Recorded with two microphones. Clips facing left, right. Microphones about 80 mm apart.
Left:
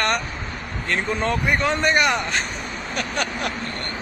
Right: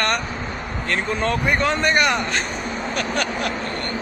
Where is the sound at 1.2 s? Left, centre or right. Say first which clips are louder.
Right 2 dB; centre.